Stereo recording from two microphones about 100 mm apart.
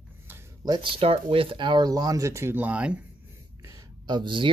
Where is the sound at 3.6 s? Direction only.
40° right (ahead or behind).